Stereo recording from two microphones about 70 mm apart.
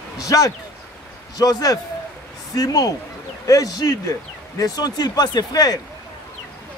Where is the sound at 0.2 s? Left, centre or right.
Left.